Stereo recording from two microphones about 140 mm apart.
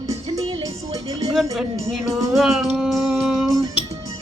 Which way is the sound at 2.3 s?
Centre (ahead or behind).